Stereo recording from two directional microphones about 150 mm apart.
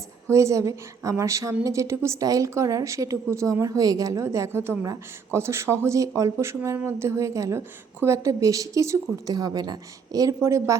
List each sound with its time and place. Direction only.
0.3 s speech: 20° right (ahead or behind)